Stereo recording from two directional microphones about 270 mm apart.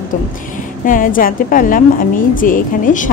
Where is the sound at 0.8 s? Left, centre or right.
Left.